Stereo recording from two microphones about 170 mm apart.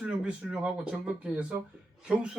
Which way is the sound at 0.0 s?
5° right (ahead or behind).